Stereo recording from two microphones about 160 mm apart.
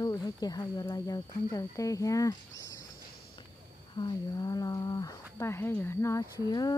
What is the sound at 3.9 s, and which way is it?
Speech, 25° left (ahead or behind).